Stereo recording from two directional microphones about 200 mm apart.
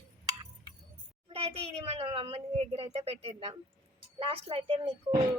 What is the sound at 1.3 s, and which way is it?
A child's voice, 30° right (ahead or behind).